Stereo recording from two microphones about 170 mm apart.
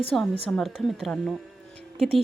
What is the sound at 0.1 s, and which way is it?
A woman's voice, centre (ahead or behind).